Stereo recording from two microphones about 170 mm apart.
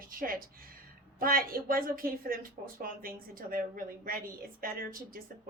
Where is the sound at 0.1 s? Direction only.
55° right (ahead or behind).